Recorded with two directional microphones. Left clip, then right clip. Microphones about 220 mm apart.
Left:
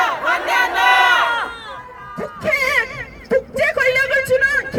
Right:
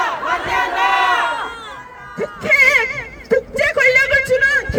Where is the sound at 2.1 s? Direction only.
20° right (ahead or behind).